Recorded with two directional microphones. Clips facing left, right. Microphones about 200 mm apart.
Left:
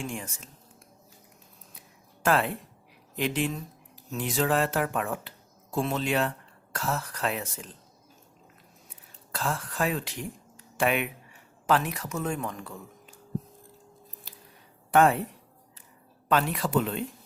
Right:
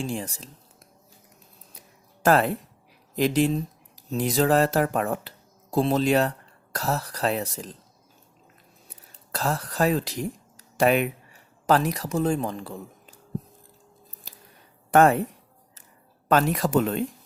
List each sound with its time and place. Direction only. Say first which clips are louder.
0.0 s speech: right 5 dB; 35° right (ahead or behind)
2.2 s speech: right 5 dB; 40° right (ahead or behind)
8.9 s a sound: right 4 dB; 40° right (ahead or behind)
11.6 s speech: right 4 dB; 40° right (ahead or behind)
14.3 s scissors: right 1 dB; 45° right (ahead or behind)
14.8 s speech: right 3 dB; 45° right (ahead or behind)
16.3 s speech: right 4 dB; 40° right (ahead or behind)